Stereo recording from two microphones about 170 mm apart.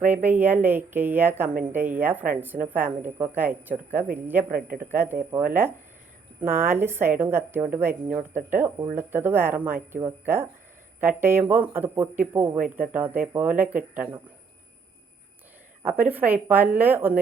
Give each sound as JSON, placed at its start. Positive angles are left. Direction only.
{"t": 0.1, "sound": "a woman's voice", "side_deg": -10}
{"t": 4.5, "sound": "speech", "side_deg": -55}
{"t": 4.9, "sound": "a woman's voice", "side_deg": -10}
{"t": 6.4, "sound": "a woman's voice", "side_deg": -15}
{"t": 15.8, "sound": "a woman's voice", "side_deg": -10}